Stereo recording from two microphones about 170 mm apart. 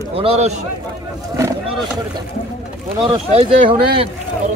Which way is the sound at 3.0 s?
35° right (ahead or behind).